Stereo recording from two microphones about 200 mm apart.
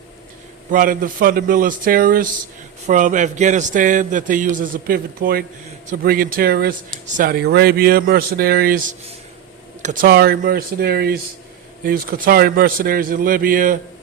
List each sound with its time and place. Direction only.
0.7 s a man's voice: 45° right (ahead or behind)